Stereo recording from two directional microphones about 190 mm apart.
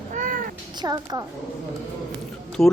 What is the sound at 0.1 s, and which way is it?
Cat, 40° right (ahead or behind).